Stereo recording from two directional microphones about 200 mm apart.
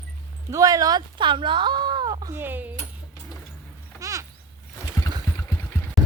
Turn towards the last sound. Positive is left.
turn(degrees=10)  # may be behind; listen again after turning